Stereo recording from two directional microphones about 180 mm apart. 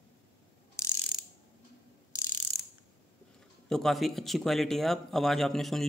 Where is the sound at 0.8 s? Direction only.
15° left (ahead or behind).